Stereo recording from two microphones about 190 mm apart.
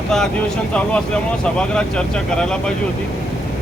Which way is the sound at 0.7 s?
5° left (ahead or behind).